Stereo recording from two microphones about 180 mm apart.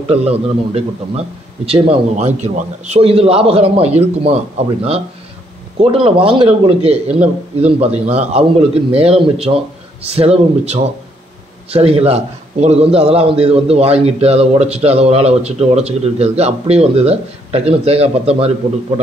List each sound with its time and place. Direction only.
0.1 s a man's voice: 35° right (ahead or behind)